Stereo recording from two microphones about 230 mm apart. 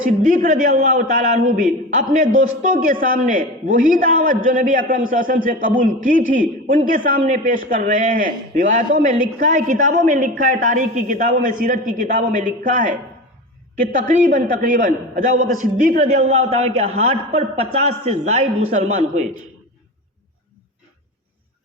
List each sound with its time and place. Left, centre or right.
0.2 s a man's voice: right
14.3 s a man's voice: right